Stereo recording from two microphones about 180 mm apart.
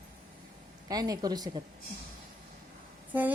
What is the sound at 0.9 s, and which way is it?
Speech, 20° right (ahead or behind).